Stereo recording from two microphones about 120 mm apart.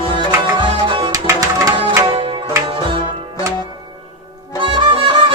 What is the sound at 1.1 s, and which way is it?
Music, 30° right (ahead or behind).